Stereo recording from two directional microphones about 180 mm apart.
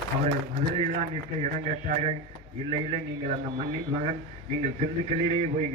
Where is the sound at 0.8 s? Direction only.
40° right (ahead or behind).